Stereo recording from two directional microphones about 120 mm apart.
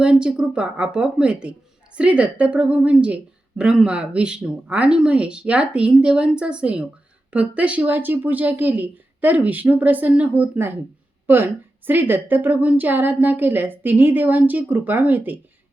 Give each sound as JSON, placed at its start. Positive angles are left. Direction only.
{"t": 0.0, "sound": "a woman's voice", "side_deg": -5}